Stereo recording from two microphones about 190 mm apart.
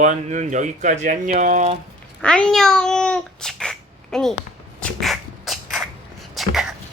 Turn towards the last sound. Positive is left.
turn(degrees=0)  # may be behind; listen again after turning